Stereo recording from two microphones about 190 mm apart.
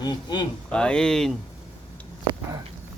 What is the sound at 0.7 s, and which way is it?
Speech, 5° left (ahead or behind).